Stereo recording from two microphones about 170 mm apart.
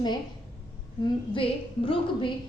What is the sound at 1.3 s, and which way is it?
A woman's voice, 30° left (ahead or behind).